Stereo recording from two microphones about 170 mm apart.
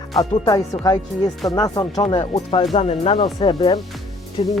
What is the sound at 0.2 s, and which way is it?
Speech, 20° left (ahead or behind).